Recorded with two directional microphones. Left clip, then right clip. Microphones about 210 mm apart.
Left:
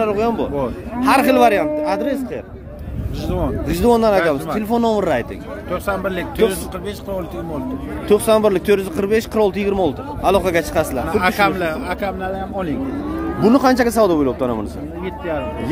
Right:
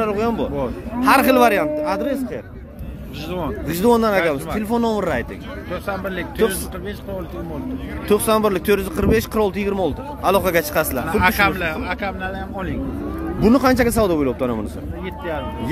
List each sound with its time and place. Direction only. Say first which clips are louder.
0.0 s speech: left 2 dB; 15° left (ahead or behind)
1.0 s speech: left 1 dB; centre (ahead or behind)
3.3 s speech: left 3 dB; 50° left (ahead or behind)
3.6 s speech: left 2 dB; 15° left (ahead or behind)
5.7 s speech: left 5 dB; 55° left (ahead or behind)
8.1 s speech: left 3 dB; 15° left (ahead or behind)
10.2 s speech: left 1 dB; 10° left (ahead or behind)
11.1 s speech: left 1 dB; 50° left (ahead or behind)
13.4 s speech: left 2 dB; 10° left (ahead or behind)
15.0 s speech: left 3 dB; 55° left (ahead or behind)